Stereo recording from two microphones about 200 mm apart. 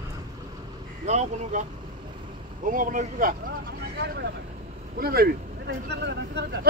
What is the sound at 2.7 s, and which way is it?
Speech, 40° right (ahead or behind).